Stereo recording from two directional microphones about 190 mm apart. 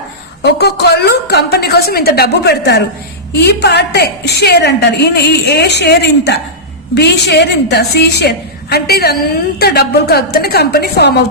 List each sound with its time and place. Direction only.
0.4 s a woman's voice: 60° left (ahead or behind)